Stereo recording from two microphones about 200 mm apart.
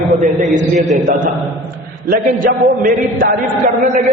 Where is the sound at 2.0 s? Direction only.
45° right (ahead or behind).